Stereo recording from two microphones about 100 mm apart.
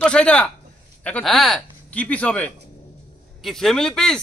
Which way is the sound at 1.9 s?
15° left (ahead or behind).